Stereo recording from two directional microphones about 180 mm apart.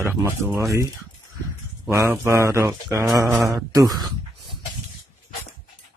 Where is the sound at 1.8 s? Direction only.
15° right (ahead or behind).